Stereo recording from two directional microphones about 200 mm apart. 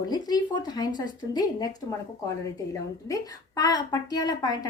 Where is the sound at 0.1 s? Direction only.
20° left (ahead or behind).